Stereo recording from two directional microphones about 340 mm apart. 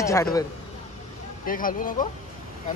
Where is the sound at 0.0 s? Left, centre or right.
Centre.